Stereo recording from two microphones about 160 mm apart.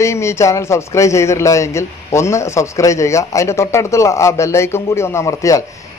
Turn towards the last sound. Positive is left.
turn(degrees=20)  # may be behind; listen again after turning